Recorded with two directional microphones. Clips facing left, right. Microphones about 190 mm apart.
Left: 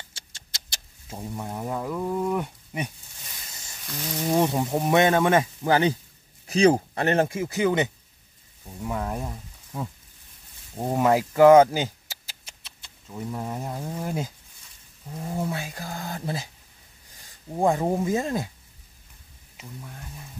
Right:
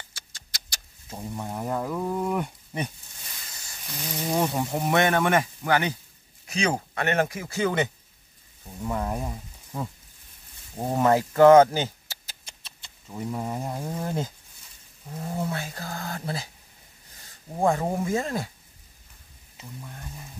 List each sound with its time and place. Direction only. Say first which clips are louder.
0.1 s cat: even; 25° left (ahead or behind)
1.1 s speech: even; centre (ahead or behind)
4.4 s speech: left 2 dB; 15° left (ahead or behind)
8.8 s speech: right 1 dB; centre (ahead or behind)
12.6 s speech: even; centre (ahead or behind)
14.0 s speech: even; 10° left (ahead or behind)
15.3 s speech: left 1 dB; 15° left (ahead or behind)
17.6 s speech: left 2 dB; 15° left (ahead or behind)